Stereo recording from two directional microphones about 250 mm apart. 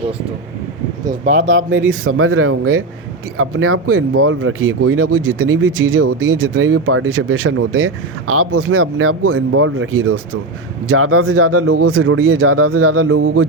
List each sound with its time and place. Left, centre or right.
1.2 s speech: right